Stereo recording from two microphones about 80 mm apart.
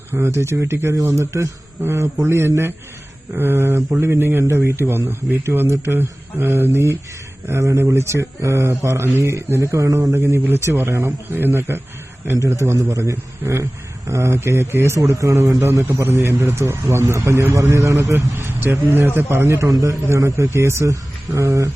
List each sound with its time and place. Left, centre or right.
0.3 s a man's voice: right
18.3 s a man's voice: right
19.6 s a man's voice: right